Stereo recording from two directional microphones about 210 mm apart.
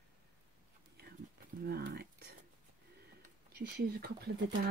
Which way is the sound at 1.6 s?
45° right (ahead or behind).